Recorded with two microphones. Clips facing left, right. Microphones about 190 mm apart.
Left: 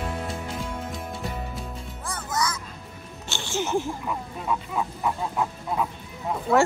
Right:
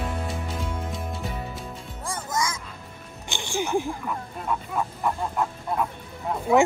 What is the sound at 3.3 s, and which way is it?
Music, 15° right (ahead or behind).